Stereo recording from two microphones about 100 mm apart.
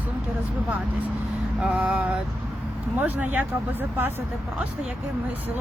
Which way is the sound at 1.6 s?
5° right (ahead or behind).